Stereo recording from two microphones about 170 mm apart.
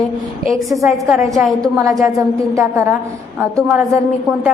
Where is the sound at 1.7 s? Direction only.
20° right (ahead or behind).